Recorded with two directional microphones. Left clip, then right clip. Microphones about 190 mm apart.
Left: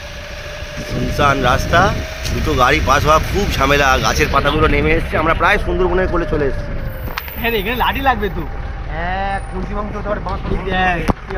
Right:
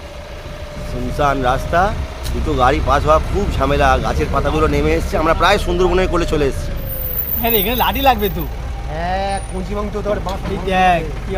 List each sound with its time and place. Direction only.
1.1 s speech: centre (ahead or behind)
5.8 s a man's voice: 10° right (ahead or behind)
7.4 s speech: 60° right (ahead or behind)
9.0 s vehicle: 90° right
10.7 s speech: 65° right (ahead or behind)